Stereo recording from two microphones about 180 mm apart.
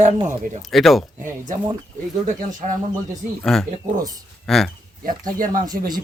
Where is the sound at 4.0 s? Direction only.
20° right (ahead or behind).